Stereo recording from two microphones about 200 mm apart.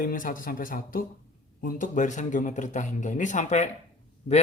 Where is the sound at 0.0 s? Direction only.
45° left (ahead or behind).